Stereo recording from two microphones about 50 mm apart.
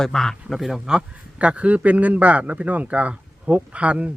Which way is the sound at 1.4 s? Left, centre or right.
Right.